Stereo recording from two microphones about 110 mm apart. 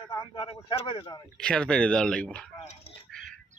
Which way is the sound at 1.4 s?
10° left (ahead or behind).